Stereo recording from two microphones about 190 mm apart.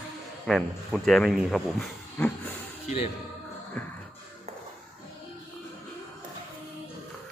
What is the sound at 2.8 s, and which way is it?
Speech, 30° left (ahead or behind).